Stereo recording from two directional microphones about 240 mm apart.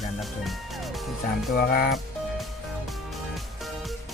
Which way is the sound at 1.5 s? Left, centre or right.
Left.